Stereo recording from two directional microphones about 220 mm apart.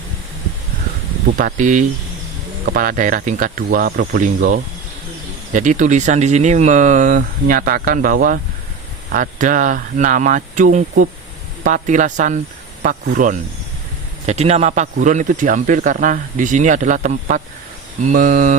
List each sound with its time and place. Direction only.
1.3 s speech: 40° right (ahead or behind)